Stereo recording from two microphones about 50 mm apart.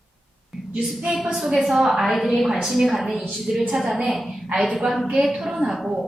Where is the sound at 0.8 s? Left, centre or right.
Centre.